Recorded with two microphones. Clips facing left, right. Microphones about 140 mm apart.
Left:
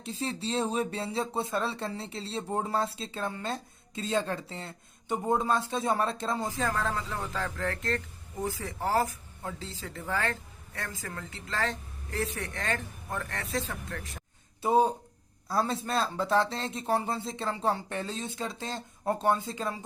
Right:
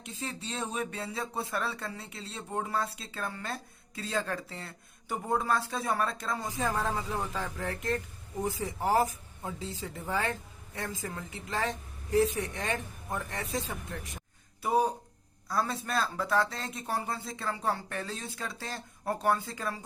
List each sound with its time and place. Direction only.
0.0 s speech: 30° left (ahead or behind)
6.7 s speech: 15° right (ahead or behind)
14.6 s speech: 25° left (ahead or behind)